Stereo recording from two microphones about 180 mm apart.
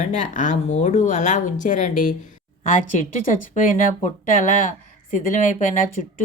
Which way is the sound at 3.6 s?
45° left (ahead or behind).